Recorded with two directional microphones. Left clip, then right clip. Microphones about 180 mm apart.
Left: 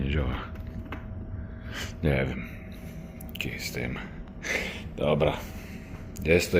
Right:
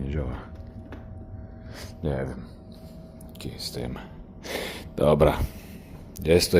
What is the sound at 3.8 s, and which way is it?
Speech, 10° right (ahead or behind).